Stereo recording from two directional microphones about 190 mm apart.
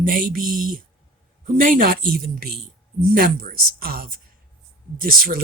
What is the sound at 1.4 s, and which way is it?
Speech, 45° right (ahead or behind).